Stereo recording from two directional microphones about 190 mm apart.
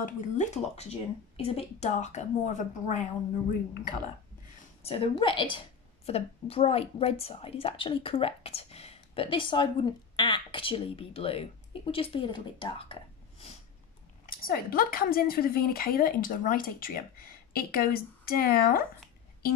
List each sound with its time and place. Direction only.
0.0 s speech: 40° left (ahead or behind)
4.8 s a woman's voice: 30° left (ahead or behind)
14.3 s speech: 50° left (ahead or behind)